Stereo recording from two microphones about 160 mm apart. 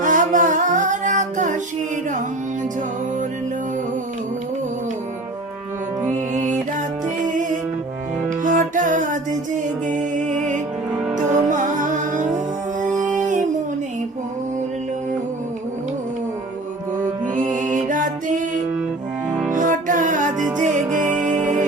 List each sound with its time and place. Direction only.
0.0 s music: 50° right (ahead or behind)
6.1 s music: 50° right (ahead or behind)
8.4 s music: 55° right (ahead or behind)
17.3 s music: 55° right (ahead or behind)